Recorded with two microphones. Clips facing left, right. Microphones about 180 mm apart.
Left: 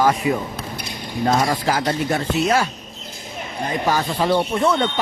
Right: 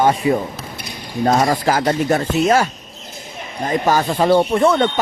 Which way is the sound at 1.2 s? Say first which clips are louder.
Right 3 dB; 45° right (ahead or behind).